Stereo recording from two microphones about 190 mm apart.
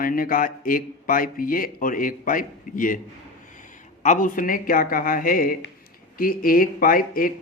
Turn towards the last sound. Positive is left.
turn(degrees=45)  # may be behind; listen again after turning